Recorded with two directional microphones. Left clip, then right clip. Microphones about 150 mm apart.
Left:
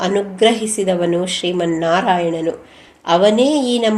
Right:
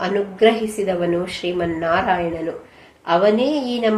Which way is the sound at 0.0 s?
50° left (ahead or behind).